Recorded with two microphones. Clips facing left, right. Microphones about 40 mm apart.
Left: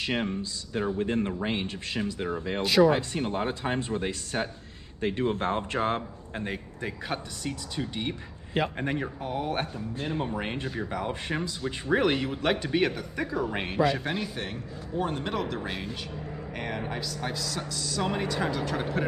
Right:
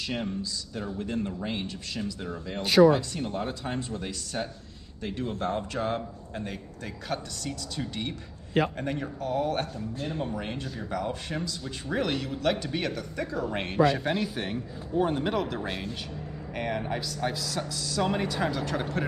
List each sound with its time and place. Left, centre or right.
0.0 s speech: left; by 19.0 s centre